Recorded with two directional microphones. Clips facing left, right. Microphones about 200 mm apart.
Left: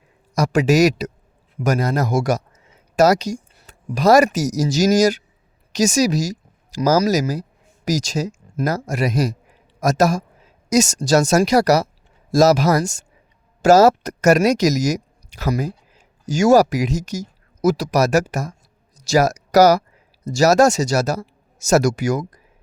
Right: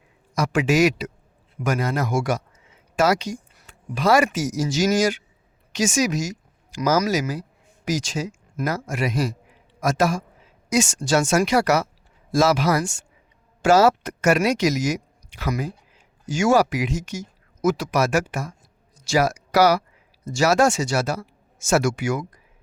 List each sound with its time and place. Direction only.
0.3 s speech: 40° left (ahead or behind)